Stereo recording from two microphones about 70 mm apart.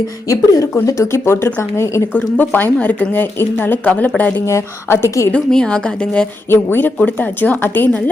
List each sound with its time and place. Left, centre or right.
0.3 s a woman's voice: left
2.1 s speech: left
4.4 s a woman's voice: left
5.3 s a woman's voice: centre
6.5 s speech: left